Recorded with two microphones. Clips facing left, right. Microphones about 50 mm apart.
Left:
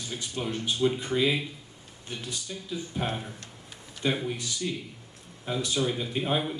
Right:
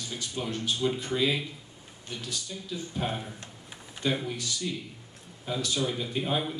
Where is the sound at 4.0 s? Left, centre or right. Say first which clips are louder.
Left 1 dB; centre.